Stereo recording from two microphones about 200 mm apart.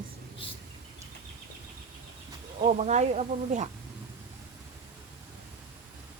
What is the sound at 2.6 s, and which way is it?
Speech, 35° right (ahead or behind).